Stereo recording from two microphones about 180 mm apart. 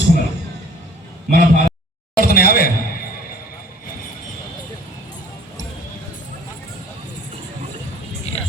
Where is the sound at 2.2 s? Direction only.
55° left (ahead or behind).